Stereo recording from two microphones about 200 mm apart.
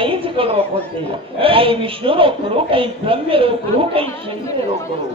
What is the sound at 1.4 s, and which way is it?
A man's voice, 25° right (ahead or behind).